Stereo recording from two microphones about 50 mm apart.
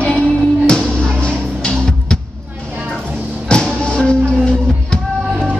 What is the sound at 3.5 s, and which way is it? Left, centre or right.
Music, centre.